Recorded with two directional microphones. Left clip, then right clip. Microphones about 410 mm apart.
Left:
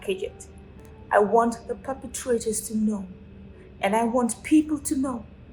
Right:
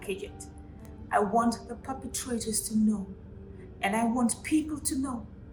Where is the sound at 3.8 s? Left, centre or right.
Centre.